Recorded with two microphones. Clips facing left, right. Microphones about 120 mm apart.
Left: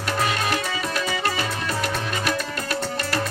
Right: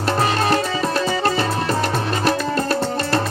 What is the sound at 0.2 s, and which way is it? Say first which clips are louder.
Music: right 5 dB; 35° right (ahead or behind).